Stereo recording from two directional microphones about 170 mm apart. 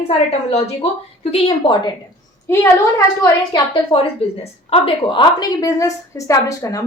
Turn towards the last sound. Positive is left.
turn(degrees=20)  # may be behind; listen again after turning